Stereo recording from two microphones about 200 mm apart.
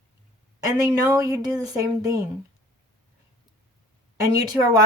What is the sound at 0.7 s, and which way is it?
A woman's voice, 15° right (ahead or behind).